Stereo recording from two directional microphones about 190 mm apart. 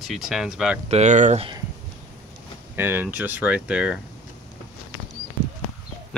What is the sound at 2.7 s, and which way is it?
Speech, 10° right (ahead or behind).